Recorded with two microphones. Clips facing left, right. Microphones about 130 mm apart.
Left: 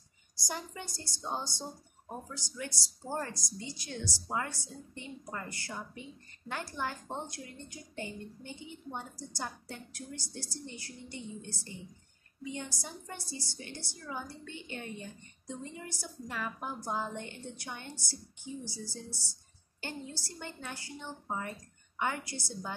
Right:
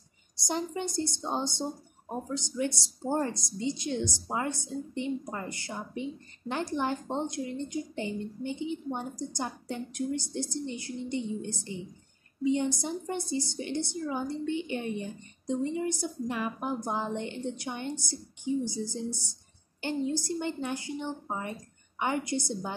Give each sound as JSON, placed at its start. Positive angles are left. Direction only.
{"t": 0.4, "sound": "a woman's voice", "side_deg": -25}